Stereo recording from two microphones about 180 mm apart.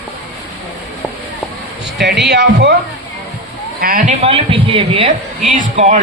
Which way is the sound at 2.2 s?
70° right (ahead or behind).